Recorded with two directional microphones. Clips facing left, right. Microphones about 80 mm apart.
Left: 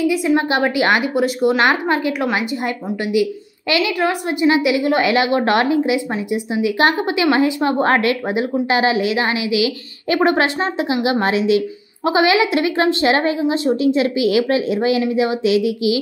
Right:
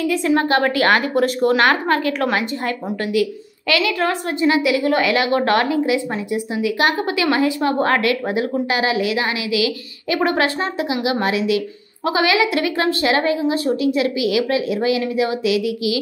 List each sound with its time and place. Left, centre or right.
0.0 s a woman's voice: centre
1.1 s a woman's voice: centre
1.6 s a woman's voice: centre